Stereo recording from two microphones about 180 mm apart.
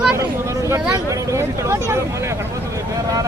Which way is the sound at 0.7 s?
15° right (ahead or behind).